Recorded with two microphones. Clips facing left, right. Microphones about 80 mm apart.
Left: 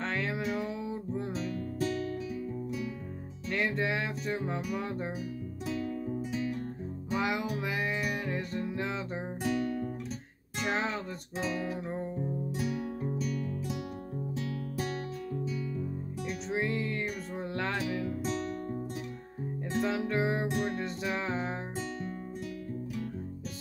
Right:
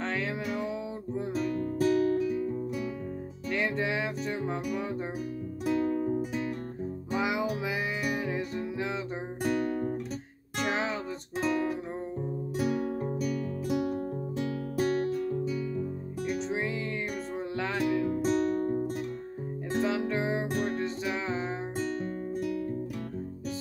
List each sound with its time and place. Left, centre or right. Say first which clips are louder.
0.0 s music: right 1 dB; centre
1.3 s music: right 5 dB; right
3.4 s music: right 1 dB; centre
5.7 s music: right 7 dB; right
7.1 s music: right 2 dB; centre
9.4 s music: right 3 dB; right
10.6 s music: right 2 dB; centre
12.5 s music: right 5 dB; right
14.8 s guitar: right 11 dB; right
16.3 s music: right 1 dB; centre
18.0 s music: right 7 dB; right
19.8 s music: right 1 dB; centre